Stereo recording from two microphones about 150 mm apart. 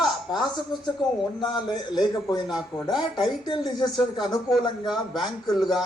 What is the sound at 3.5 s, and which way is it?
Speech, 30° left (ahead or behind).